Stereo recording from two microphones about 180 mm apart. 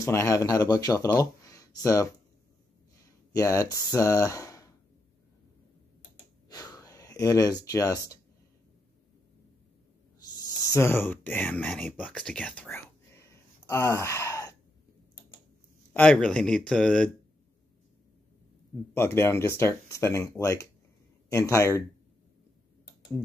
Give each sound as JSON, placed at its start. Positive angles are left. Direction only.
{"t": 0.0, "sound": "speech", "side_deg": 15}
{"t": 3.3, "sound": "speech", "side_deg": 20}
{"t": 6.5, "sound": "a sound", "side_deg": 20}
{"t": 10.7, "sound": "speech", "side_deg": 15}
{"t": 15.9, "sound": "speech", "side_deg": 10}
{"t": 18.9, "sound": "speech", "side_deg": 15}